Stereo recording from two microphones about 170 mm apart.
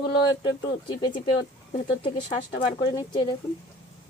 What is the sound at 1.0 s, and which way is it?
A woman's voice, 30° left (ahead or behind).